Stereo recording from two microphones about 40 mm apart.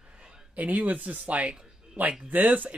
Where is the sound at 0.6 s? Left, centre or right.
Right.